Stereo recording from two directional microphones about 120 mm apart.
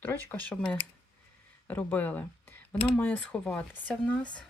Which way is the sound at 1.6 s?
15° left (ahead or behind).